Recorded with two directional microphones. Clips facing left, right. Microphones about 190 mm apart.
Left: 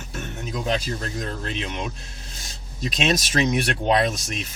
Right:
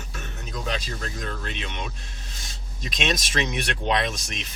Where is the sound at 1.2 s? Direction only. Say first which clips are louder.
Left 4 dB; 35° left (ahead or behind).